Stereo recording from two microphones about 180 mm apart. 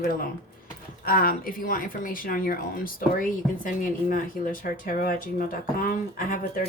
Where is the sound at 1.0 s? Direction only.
55° left (ahead or behind).